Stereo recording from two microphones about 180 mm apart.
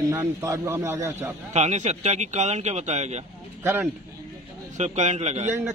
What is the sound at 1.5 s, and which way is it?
Speech, 40° right (ahead or behind).